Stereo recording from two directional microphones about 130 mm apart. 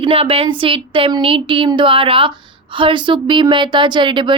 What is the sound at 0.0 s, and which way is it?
A woman's voice, 45° right (ahead or behind).